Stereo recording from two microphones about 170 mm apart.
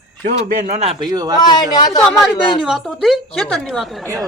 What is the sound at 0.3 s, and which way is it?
Speech, 50° right (ahead or behind).